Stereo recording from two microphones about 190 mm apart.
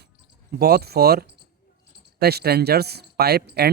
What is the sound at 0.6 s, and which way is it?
Speech, 55° right (ahead or behind).